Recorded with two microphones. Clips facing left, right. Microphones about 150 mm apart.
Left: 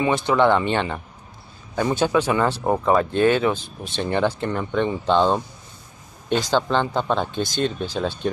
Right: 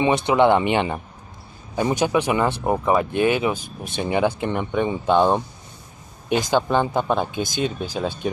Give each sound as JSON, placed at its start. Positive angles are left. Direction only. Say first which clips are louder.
{"t": 0.0, "sound": "speech", "louder": "right 1 dB", "side_deg": -20}